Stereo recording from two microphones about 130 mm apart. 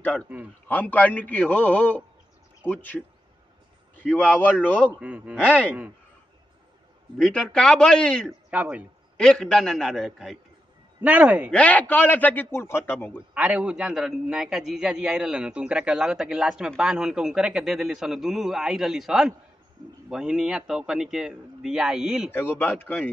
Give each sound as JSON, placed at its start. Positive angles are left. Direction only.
{"t": 0.0, "sound": "a man's voice", "side_deg": 10}
{"t": 4.0, "sound": "a man's voice", "side_deg": 10}
{"t": 4.8, "sound": "speech", "side_deg": -10}
{"t": 5.3, "sound": "a man's voice", "side_deg": 10}
{"t": 5.6, "sound": "speech", "side_deg": -10}
{"t": 7.2, "sound": "a man's voice", "side_deg": 5}
{"t": 8.5, "sound": "speech", "side_deg": -10}
{"t": 9.1, "sound": "a man's voice", "side_deg": 5}
{"t": 11.0, "sound": "speech", "side_deg": -10}
{"t": 11.5, "sound": "a man's voice", "side_deg": 10}
{"t": 13.3, "sound": "a man's voice", "side_deg": -10}
{"t": 22.6, "sound": "a man's voice", "side_deg": 15}